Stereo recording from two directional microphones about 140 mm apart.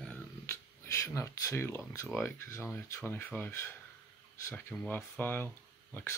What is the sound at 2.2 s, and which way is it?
Speech, 20° left (ahead or behind).